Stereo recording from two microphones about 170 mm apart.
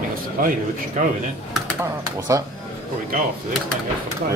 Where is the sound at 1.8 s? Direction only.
20° right (ahead or behind).